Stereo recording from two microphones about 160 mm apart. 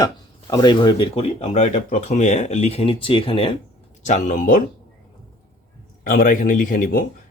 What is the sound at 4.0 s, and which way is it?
Speech, 50° left (ahead or behind).